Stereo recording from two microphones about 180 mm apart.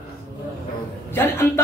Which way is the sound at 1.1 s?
15° left (ahead or behind).